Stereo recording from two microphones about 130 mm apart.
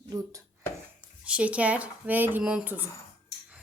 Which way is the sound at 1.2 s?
10° right (ahead or behind).